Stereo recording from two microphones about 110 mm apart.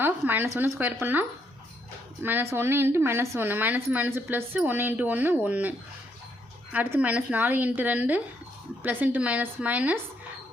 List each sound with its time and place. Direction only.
0.0 s speech: 20° right (ahead or behind)
2.2 s a woman's voice: 20° right (ahead or behind)
6.7 s speech: 15° right (ahead or behind)